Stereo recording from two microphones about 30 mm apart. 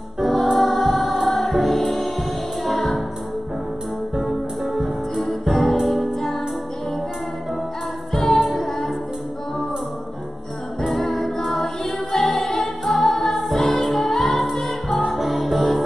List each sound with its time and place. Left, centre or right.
0.2 s music: centre
4.2 s music: centre
8.1 s music: centre
10.9 s music: centre
15.0 s music: centre